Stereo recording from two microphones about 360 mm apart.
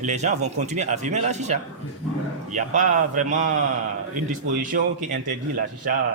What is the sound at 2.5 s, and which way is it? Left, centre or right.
Speech, right.